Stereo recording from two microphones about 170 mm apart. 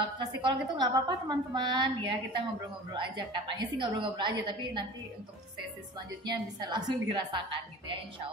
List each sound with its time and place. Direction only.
0.2 s a woman's voice: 25° right (ahead or behind)
5.9 s a woman's voice: 25° right (ahead or behind)